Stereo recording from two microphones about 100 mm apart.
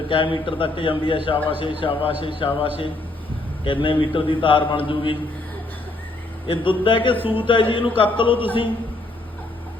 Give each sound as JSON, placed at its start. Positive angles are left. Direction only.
{"t": 0.1, "sound": "a man's voice", "side_deg": 60}
{"t": 6.5, "sound": "a man's voice", "side_deg": 60}